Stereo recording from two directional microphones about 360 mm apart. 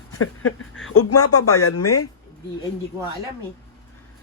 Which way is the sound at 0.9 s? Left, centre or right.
Left.